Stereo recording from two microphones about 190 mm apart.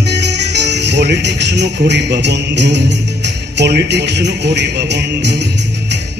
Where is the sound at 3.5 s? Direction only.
60° right (ahead or behind).